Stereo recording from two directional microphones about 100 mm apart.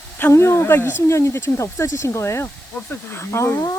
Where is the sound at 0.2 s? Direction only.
25° left (ahead or behind).